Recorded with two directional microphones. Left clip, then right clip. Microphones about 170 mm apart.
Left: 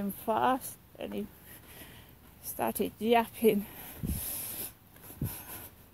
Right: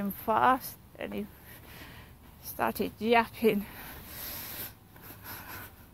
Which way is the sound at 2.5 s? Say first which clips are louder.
Right 2 dB; 50° left (ahead or behind).